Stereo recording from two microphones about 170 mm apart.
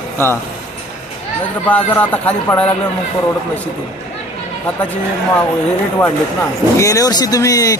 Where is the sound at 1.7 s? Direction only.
10° left (ahead or behind).